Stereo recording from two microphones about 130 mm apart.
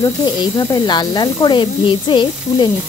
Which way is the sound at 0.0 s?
35° left (ahead or behind).